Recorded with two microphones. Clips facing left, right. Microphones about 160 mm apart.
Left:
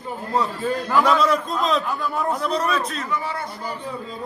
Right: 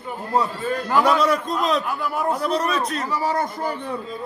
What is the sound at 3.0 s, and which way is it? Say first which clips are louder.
Speech: right 4 dB; 35° right (ahead or behind).